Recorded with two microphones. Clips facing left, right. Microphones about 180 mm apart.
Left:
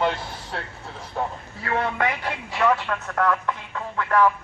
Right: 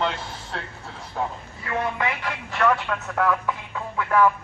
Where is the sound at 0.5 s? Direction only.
5° left (ahead or behind).